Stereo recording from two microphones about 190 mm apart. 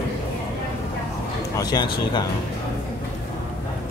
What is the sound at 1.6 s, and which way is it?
Speech, 20° left (ahead or behind).